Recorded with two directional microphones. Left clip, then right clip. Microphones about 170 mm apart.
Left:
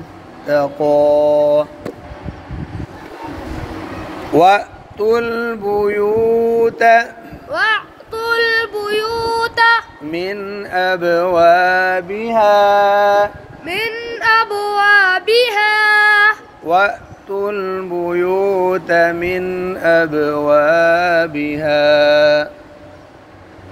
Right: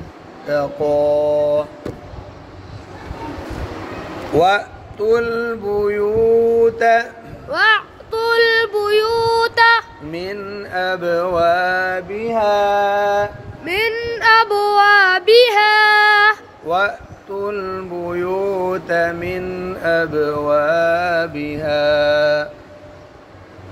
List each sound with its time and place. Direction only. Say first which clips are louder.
0.5 s mantra: left 4 dB; 45° left (ahead or behind)
4.3 s mantra: left 4 dB; 45° left (ahead or behind)
7.5 s child singing: right 2 dB; 25° right (ahead or behind)
10.1 s mantra: left 4 dB; 45° left (ahead or behind)
13.7 s child singing: right 2 dB; 30° right (ahead or behind)
16.6 s a man's voice: left 4 dB; 45° left (ahead or behind)
17.4 s a sound: left 3 dB; 45° left (ahead or behind)